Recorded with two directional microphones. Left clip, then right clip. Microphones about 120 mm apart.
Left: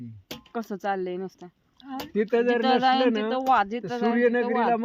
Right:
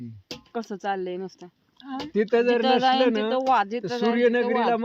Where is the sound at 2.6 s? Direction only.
20° left (ahead or behind).